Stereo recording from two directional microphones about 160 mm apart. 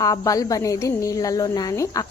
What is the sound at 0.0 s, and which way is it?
A woman's voice, 20° left (ahead or behind).